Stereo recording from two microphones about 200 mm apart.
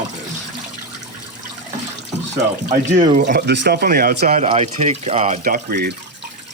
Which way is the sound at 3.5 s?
55° right (ahead or behind).